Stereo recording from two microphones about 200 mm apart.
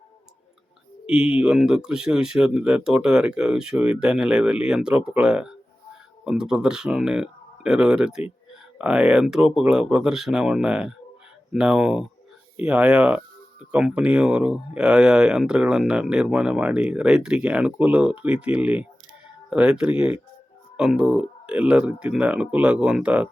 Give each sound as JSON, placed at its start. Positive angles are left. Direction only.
{"t": 1.1, "sound": "speech", "side_deg": -5}